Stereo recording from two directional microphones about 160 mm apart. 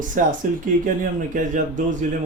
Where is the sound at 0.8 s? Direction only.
55° right (ahead or behind).